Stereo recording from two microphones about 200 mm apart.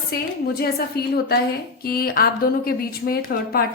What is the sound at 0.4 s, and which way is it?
A woman's voice, 50° left (ahead or behind).